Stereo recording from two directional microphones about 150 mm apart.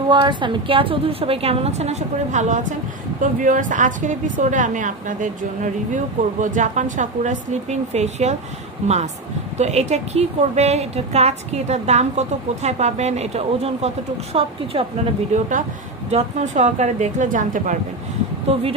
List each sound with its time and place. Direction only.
0.1 s a woman's voice: 30° right (ahead or behind)
16.1 s a woman's voice: 50° right (ahead or behind)
18.5 s a woman's voice: 40° right (ahead or behind)